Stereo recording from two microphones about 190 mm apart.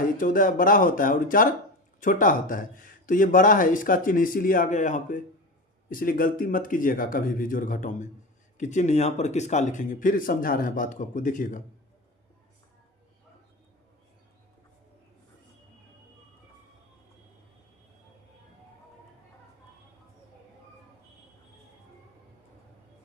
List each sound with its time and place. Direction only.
0.2 s speech: 45° left (ahead or behind)